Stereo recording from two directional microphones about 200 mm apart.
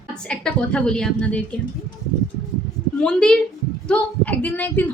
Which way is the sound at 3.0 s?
5° left (ahead or behind).